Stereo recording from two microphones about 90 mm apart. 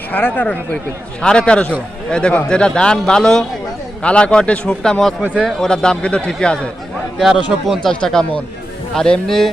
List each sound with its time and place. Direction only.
0.1 s a man's voice: 20° left (ahead or behind)
7.2 s a man's voice: 5° right (ahead or behind)
7.7 s speech: 5° left (ahead or behind)